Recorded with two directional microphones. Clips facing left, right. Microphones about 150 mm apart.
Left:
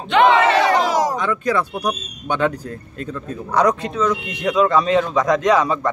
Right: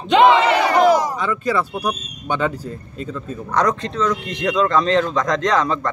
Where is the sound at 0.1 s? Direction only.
15° right (ahead or behind).